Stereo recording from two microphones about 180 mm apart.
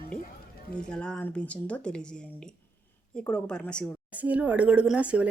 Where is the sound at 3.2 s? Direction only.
5° left (ahead or behind).